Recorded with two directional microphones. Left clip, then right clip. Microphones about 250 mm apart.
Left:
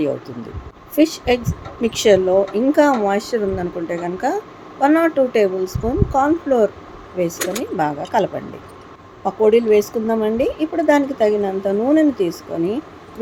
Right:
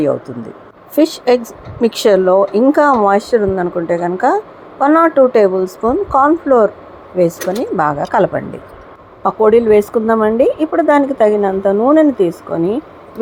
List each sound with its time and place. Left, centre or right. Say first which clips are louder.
0.9 s a woman's voice: right 5 dB; centre